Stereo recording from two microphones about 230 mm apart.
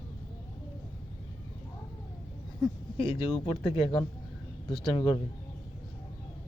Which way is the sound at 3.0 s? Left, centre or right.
Left.